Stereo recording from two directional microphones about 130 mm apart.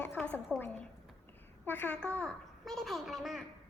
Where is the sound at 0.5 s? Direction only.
5° left (ahead or behind).